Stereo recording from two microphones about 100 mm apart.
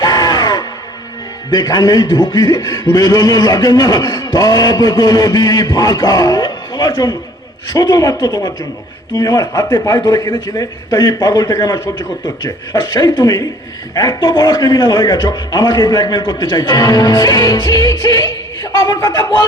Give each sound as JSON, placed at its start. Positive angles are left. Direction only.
{"t": 0.0, "sound": "music", "side_deg": 45}
{"t": 1.5, "sound": "a man's voice", "side_deg": 45}
{"t": 14.2, "sound": "a man's voice", "side_deg": 50}